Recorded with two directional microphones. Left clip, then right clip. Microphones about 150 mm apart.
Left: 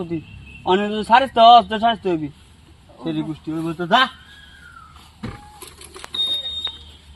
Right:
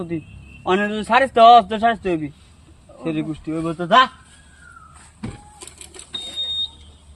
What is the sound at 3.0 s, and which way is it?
Speech, 10° right (ahead or behind).